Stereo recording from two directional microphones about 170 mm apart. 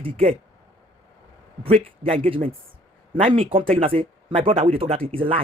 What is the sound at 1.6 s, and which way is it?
Speech, 35° right (ahead or behind).